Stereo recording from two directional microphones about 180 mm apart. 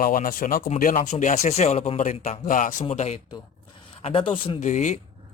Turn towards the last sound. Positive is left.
turn(degrees=40)  # may be behind; listen again after turning